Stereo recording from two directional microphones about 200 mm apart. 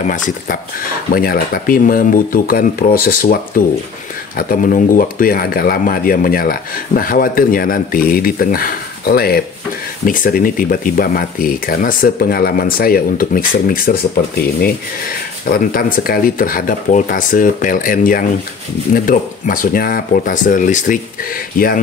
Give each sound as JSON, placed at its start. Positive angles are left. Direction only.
{"t": 0.0, "sound": "speech", "side_deg": 40}